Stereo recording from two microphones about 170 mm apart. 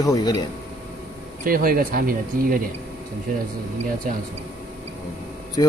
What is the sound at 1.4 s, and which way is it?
Speech, 55° right (ahead or behind).